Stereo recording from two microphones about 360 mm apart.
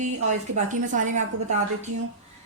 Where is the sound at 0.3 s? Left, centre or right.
Centre.